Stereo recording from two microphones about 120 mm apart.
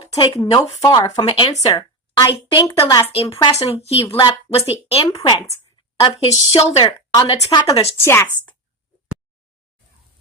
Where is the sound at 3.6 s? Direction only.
60° left (ahead or behind).